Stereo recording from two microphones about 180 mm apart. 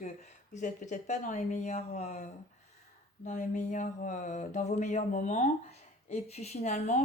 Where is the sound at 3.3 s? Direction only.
40° left (ahead or behind).